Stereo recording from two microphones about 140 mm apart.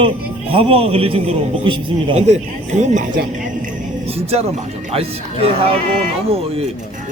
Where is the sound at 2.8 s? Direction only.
60° right (ahead or behind).